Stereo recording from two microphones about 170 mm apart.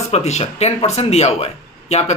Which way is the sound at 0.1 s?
40° left (ahead or behind).